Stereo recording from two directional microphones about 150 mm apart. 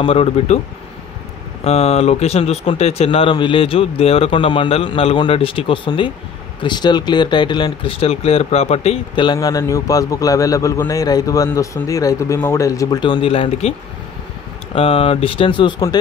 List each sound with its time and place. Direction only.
0.0 s speech: 40° left (ahead or behind)
1.6 s speech: 40° left (ahead or behind)
14.8 s speech: 40° left (ahead or behind)